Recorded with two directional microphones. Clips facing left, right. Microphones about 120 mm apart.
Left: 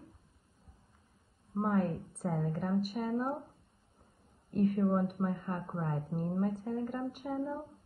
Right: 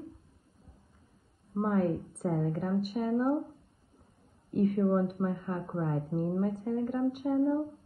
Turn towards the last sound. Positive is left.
turn(degrees=0)  # may be behind; listen again after turning